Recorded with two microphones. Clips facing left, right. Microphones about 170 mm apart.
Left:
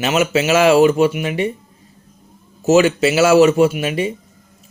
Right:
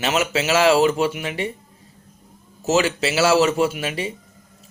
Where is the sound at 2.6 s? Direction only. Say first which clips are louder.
Left 7 dB; 20° left (ahead or behind).